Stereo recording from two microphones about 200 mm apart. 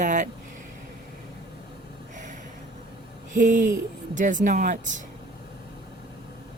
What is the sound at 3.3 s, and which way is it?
Speech, 40° right (ahead or behind).